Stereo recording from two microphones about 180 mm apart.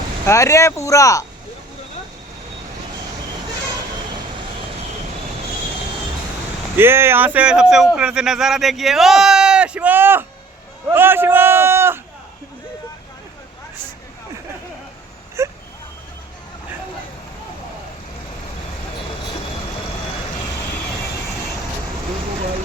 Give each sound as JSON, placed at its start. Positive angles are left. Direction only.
{"t": 0.3, "sound": "speech", "side_deg": 15}
{"t": 6.7, "sound": "speech", "side_deg": -15}
{"t": 15.4, "sound": "a sound", "side_deg": -15}